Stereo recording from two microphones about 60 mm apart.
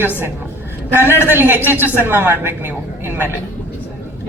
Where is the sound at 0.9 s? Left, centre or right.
Right.